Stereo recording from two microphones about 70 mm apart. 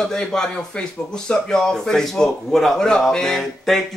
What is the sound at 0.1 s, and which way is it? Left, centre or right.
Speech, centre.